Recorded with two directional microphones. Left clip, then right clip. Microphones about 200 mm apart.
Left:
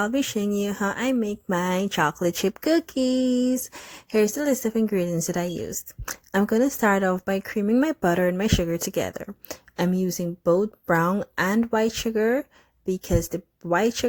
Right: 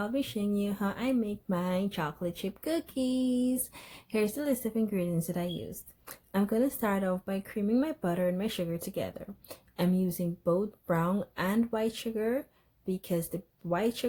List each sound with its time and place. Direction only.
0.0 s speech: 50° left (ahead or behind)